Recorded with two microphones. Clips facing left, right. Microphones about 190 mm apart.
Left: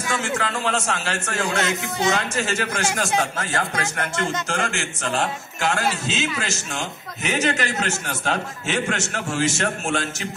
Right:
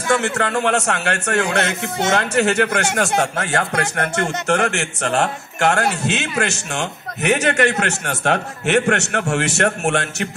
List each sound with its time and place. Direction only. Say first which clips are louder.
0.1 s a man's voice: right 7 dB; 65° right (ahead or behind)